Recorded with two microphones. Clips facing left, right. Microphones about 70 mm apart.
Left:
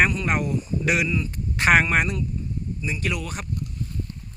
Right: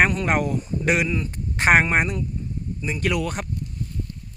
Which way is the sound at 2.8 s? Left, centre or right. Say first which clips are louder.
Right 5 dB; right.